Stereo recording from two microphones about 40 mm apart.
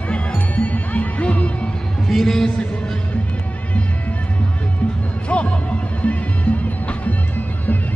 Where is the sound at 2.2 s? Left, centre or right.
Centre.